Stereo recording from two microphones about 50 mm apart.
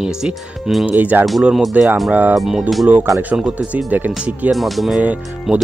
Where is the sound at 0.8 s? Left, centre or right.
Right.